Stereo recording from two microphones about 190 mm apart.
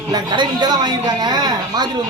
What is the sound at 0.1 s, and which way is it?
A woman's voice, 25° right (ahead or behind).